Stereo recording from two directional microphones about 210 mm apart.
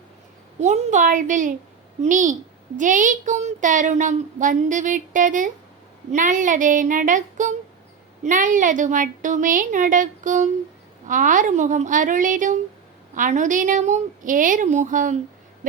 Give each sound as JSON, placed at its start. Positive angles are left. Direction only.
{"t": 0.6, "sound": "a woman's voice", "side_deg": -35}